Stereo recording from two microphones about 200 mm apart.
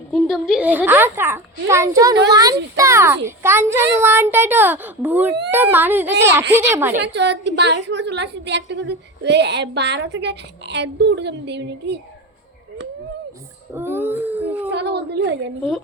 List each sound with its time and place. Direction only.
0.1 s a child's voice: centre (ahead or behind)
7.0 s a woman's voice: 60° right (ahead or behind)
13.7 s baby cry: 10° right (ahead or behind)
14.7 s a sound: 55° right (ahead or behind)